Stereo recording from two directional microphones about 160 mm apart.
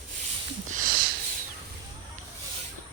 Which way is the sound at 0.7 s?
60° right (ahead or behind).